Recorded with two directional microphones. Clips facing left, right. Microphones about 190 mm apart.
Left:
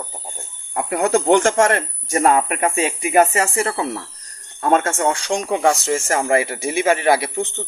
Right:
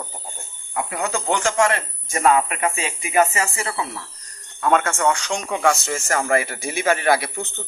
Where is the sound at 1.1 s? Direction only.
50° left (ahead or behind).